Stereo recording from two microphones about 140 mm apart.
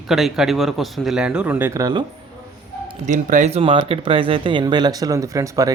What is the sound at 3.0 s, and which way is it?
Speech, 60° right (ahead or behind).